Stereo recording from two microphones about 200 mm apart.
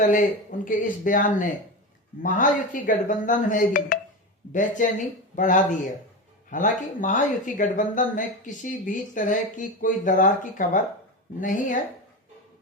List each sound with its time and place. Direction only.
0.0 s speech: 40° left (ahead or behind)